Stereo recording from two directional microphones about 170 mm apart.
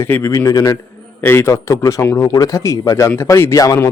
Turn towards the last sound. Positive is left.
turn(degrees=20)  # may be behind; listen again after turning